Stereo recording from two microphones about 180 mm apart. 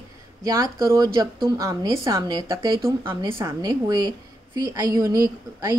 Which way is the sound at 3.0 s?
15° right (ahead or behind).